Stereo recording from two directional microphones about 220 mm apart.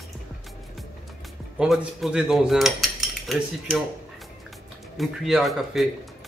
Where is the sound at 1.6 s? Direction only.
Centre (ahead or behind).